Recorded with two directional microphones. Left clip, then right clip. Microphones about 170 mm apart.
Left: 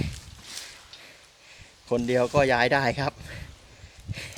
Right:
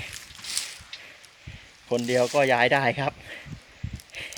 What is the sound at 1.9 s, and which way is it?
Speech, 20° left (ahead or behind).